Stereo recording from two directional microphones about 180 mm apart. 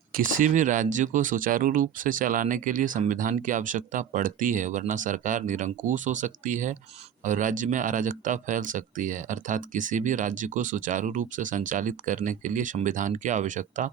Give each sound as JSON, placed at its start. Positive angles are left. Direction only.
{"t": 0.3, "sound": "speech", "side_deg": -45}